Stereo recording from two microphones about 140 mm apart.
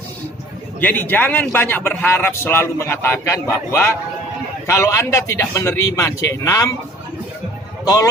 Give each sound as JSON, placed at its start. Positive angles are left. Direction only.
{"t": 0.8, "sound": "a man's voice", "side_deg": 15}
{"t": 7.9, "sound": "a man's voice", "side_deg": 25}